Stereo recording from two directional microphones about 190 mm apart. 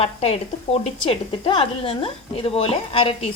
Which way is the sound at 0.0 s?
30° left (ahead or behind).